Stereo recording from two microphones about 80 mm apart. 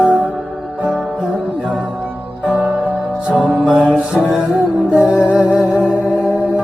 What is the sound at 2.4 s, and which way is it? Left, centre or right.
Music, centre.